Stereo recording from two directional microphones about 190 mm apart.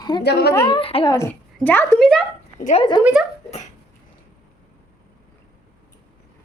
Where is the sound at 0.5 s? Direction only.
25° left (ahead or behind).